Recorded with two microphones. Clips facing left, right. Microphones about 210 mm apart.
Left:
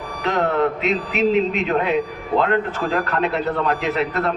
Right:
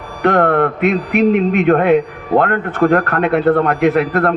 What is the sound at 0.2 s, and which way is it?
A man's voice, 55° right (ahead or behind).